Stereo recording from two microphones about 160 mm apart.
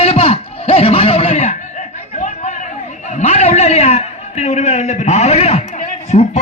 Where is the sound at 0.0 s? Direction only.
35° left (ahead or behind).